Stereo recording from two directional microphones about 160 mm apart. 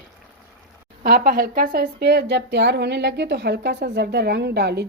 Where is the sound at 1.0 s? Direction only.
70° right (ahead or behind).